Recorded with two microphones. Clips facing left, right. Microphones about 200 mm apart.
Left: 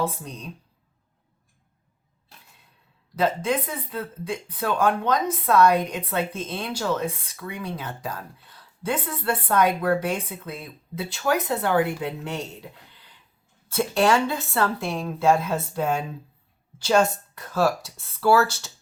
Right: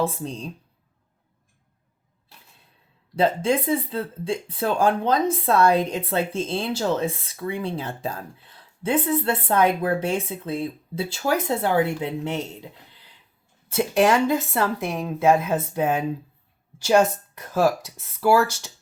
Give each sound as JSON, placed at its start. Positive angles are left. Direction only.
{"t": 0.0, "sound": "speech", "side_deg": -25}
{"t": 3.2, "sound": "speech", "side_deg": -30}
{"t": 13.7, "sound": "a woman's voice", "side_deg": -15}